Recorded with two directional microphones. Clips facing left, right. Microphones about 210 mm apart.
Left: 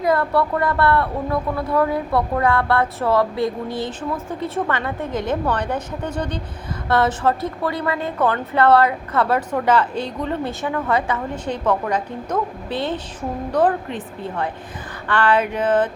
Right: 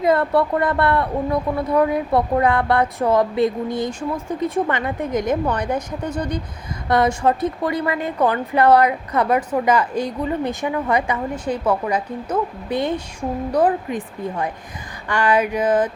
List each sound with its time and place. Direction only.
0.0 s a woman's voice: 25° right (ahead or behind)